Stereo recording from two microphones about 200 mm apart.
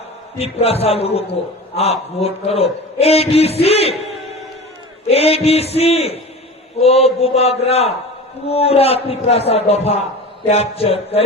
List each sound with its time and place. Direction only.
0.3 s a man's voice: 30° left (ahead or behind)